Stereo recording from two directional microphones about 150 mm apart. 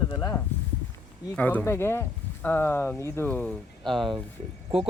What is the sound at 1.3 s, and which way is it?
Speech, 10° left (ahead or behind).